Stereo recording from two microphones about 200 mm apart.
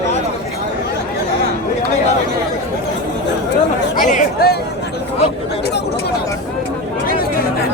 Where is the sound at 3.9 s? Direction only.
40° left (ahead or behind).